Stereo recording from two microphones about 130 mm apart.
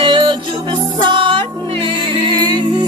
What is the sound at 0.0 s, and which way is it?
Music, 40° right (ahead or behind).